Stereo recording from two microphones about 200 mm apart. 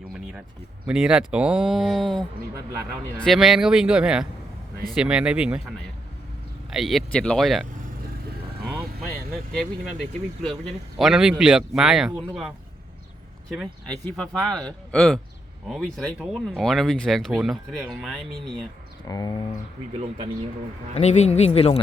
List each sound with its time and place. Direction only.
0.9 s speech: 5° right (ahead or behind)
6.7 s speech: centre (ahead or behind)
9.3 s speech: centre (ahead or behind)
19.0 s speech: 20° left (ahead or behind)
20.9 s speech: 35° left (ahead or behind)